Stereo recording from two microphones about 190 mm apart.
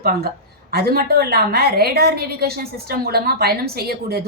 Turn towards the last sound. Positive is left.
turn(degrees=-55)  # may be behind; listen again after turning